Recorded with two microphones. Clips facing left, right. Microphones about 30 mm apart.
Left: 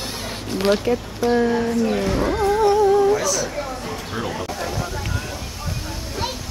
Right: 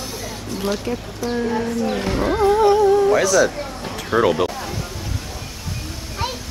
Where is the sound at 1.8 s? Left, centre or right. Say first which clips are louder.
Left 1 dB; centre.